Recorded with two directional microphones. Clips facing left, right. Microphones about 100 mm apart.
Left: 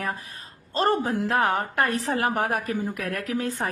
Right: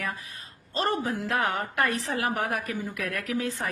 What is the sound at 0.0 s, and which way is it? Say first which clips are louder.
A woman's voice: left 3 dB; 45° left (ahead or behind).